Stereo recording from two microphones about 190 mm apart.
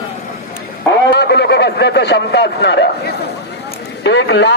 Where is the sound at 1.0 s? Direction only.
60° left (ahead or behind).